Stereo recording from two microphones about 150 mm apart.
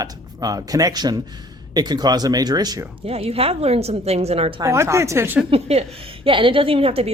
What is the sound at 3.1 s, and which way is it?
A woman's voice, 40° right (ahead or behind).